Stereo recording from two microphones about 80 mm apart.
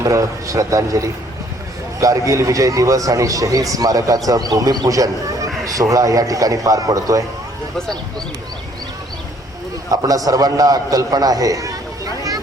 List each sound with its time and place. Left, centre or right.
0.0 s a man's voice: right
9.9 s a man's voice: right